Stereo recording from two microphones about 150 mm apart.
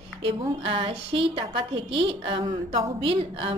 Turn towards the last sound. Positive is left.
turn(degrees=-40)  # may be behind; listen again after turning